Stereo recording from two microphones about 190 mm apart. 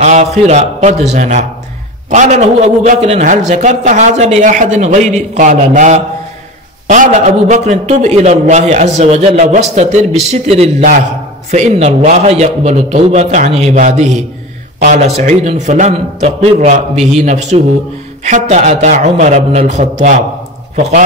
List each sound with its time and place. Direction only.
0.0 s a man's voice: 35° right (ahead or behind)